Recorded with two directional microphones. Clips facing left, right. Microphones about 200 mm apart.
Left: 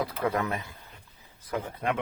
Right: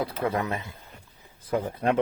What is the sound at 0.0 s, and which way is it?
Speech, 20° right (ahead or behind).